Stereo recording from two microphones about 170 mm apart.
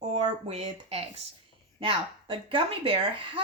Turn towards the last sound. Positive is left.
turn(degrees=-30)  # may be behind; listen again after turning